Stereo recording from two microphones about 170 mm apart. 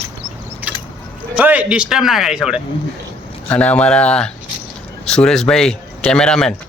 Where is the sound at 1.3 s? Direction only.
10° right (ahead or behind).